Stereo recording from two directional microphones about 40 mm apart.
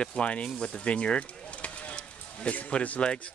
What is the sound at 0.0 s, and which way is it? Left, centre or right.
Speech, left.